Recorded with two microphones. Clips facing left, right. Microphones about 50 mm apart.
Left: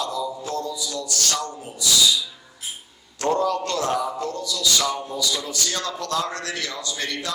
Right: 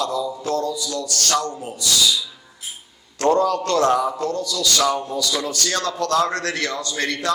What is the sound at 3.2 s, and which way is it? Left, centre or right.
A man's voice, right.